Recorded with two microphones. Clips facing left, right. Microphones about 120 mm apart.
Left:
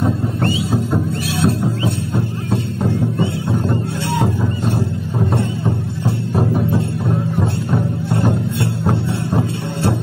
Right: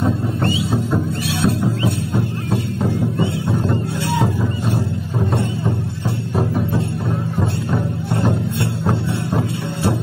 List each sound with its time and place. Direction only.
0.0 s music: centre (ahead or behind)
2.8 s music: centre (ahead or behind)
9.3 s music: 20° left (ahead or behind)